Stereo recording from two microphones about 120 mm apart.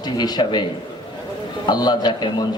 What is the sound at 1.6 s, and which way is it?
Speech, 35° left (ahead or behind).